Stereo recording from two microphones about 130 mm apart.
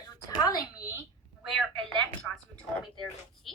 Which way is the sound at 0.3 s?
30° left (ahead or behind).